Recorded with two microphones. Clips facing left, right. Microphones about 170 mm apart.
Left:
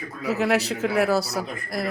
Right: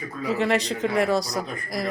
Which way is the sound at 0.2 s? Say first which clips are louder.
Left 1 dB; 5° left (ahead or behind).